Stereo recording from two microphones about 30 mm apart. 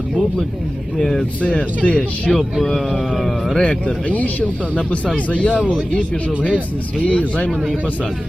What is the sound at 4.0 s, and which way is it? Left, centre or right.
Speech, left.